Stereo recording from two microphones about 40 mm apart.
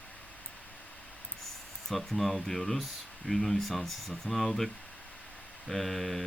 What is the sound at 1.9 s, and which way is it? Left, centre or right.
Speech, centre.